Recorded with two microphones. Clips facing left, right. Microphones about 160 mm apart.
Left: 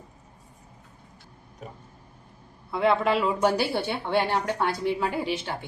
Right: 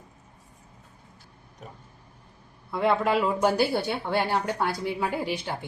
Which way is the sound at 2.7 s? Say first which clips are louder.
Left 1 dB; centre (ahead or behind).